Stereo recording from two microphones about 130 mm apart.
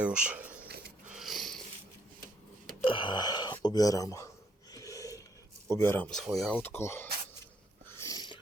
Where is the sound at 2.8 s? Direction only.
40° left (ahead or behind).